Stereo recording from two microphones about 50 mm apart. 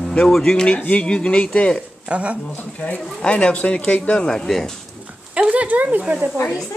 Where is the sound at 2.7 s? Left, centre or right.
Left.